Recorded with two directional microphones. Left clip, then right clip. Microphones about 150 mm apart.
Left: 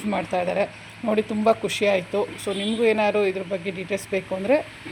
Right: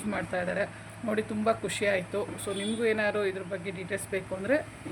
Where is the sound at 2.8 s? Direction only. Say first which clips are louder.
Left 8 dB; 40° left (ahead or behind).